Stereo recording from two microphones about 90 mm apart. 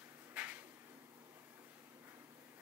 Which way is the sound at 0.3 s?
15° right (ahead or behind).